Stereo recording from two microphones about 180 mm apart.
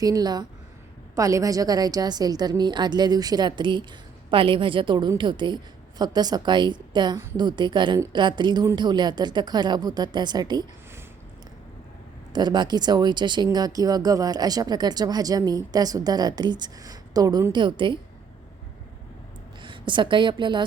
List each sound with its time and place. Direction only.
0.0 s speech: 20° right (ahead or behind)
12.3 s speech: 25° right (ahead or behind)
19.6 s a woman's voice: 25° right (ahead or behind)